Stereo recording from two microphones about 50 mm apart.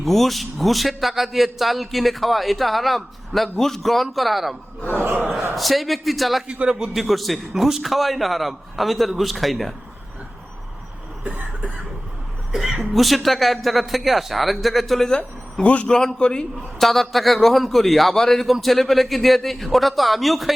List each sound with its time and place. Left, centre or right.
0.0 s a man's voice: centre
5.5 s a man's voice: centre
6.7 s a man's voice: centre
6.9 s a man's voice: centre
12.5 s a sound: centre
12.9 s a man's voice: centre
15.6 s a man's voice: left
16.0 s a man's voice: centre
16.8 s a man's voice: centre